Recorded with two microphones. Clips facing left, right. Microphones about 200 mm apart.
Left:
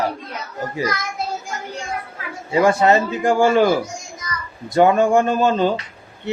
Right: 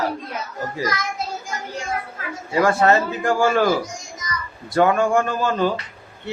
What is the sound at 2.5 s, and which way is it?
A man's voice, 20° left (ahead or behind).